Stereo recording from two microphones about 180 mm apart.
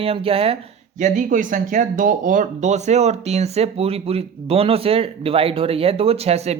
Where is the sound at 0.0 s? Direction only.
30° right (ahead or behind).